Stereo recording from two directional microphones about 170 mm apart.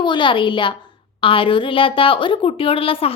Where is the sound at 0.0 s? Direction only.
30° left (ahead or behind).